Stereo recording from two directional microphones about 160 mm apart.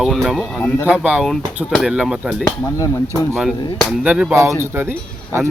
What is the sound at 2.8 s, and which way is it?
Speech, 20° left (ahead or behind).